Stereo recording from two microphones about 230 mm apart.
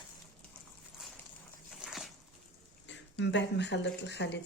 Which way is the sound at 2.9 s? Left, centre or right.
Left.